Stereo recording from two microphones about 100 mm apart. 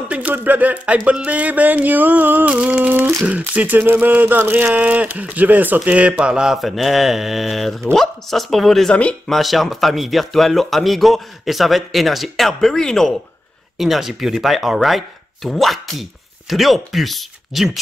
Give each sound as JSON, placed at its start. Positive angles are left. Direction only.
{"t": 0.1, "sound": "speech", "side_deg": -15}
{"t": 8.9, "sound": "speech", "side_deg": 10}
{"t": 9.4, "sound": "speech", "side_deg": 0}